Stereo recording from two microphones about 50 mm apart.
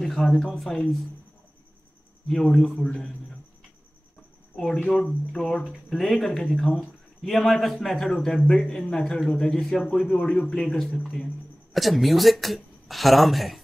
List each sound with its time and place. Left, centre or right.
0.0 s speech: centre
2.4 s speech: centre
5.3 s speech: centre
10.1 s speech: left
10.4 s speech: centre